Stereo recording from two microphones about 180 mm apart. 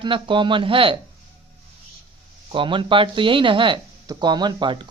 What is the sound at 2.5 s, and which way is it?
Speech, 30° right (ahead or behind).